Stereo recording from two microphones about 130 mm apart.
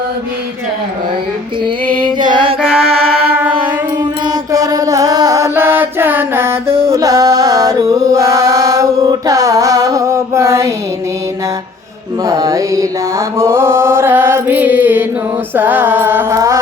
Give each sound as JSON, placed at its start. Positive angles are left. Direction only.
{"t": 2.1, "sound": "music", "side_deg": -35}
{"t": 2.6, "sound": "music", "side_deg": -5}
{"t": 3.2, "sound": "music", "side_deg": -15}
{"t": 4.5, "sound": "music", "side_deg": -30}
{"t": 12.2, "sound": "mantra", "side_deg": -25}
{"t": 15.5, "sound": "music", "side_deg": -15}